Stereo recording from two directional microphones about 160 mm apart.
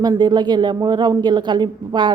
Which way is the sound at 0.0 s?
25° right (ahead or behind).